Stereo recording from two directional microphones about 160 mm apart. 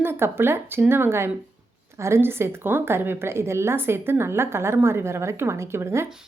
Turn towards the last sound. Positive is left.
turn(degrees=-15)  # may be behind; listen again after turning